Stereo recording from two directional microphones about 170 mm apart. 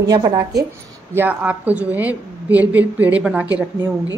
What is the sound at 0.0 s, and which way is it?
Speech, 25° right (ahead or behind).